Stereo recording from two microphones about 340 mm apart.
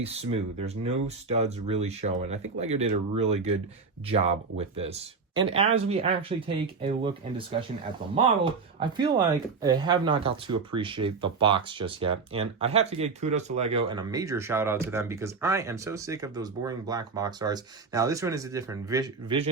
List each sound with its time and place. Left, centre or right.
0.0 s speech: centre
8.8 s speech: centre